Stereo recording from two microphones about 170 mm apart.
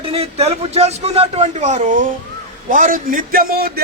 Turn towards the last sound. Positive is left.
turn(degrees=-65)  # may be behind; listen again after turning